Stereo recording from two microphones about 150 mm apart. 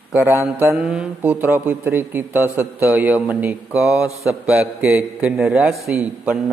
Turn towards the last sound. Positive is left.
turn(degrees=-5)  # may be behind; listen again after turning